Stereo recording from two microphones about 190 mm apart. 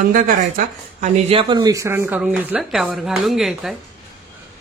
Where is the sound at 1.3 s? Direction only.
25° right (ahead or behind); by 3.7 s centre (ahead or behind).